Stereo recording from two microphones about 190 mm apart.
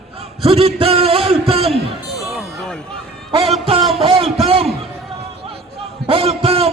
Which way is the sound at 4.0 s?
30° right (ahead or behind).